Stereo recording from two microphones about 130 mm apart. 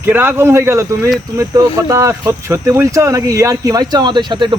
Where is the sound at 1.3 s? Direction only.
25° right (ahead or behind).